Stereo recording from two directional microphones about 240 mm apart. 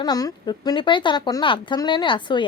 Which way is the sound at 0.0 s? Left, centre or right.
Centre.